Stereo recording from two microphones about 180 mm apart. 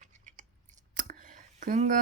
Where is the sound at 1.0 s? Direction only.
45° right (ahead or behind).